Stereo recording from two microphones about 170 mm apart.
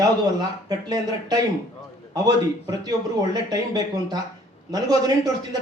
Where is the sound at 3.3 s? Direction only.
20° right (ahead or behind).